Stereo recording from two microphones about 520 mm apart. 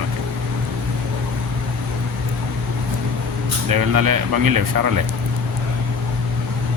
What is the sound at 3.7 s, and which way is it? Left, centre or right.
Speech, right.